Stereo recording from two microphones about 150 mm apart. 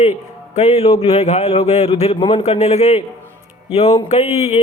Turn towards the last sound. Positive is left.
turn(degrees=45)  # may be behind; listen again after turning